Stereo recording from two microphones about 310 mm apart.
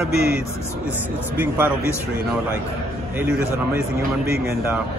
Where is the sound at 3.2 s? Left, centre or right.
Centre.